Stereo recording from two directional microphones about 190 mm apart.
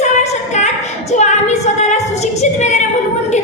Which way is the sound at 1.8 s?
35° left (ahead or behind).